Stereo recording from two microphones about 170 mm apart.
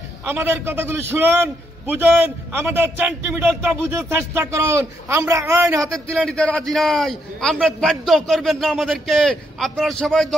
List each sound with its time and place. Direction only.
0.2 s a man's voice: 10° right (ahead or behind)
5.9 s a man's voice: 5° left (ahead or behind)